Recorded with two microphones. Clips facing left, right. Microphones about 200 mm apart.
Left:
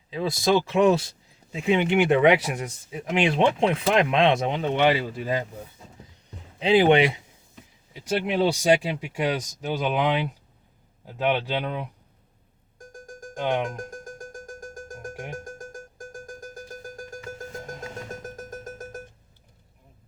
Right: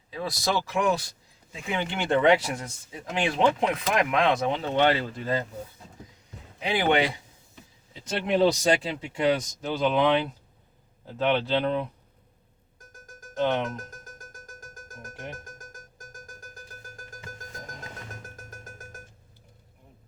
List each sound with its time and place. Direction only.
0.1 s speech: 25° left (ahead or behind)
6.6 s speech: 25° left (ahead or behind)
8.0 s speech: 10° left (ahead or behind)
13.3 s speech: 15° left (ahead or behind)
14.1 s music: 30° left (ahead or behind)